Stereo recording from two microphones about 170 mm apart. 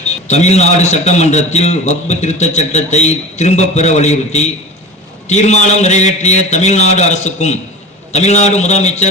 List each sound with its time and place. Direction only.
0.3 s a man's voice: 40° left (ahead or behind)